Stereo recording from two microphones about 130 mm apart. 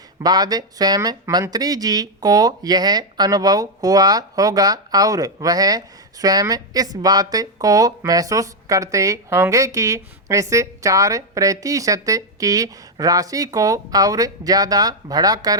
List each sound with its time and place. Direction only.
0.2 s speech: 30° right (ahead or behind)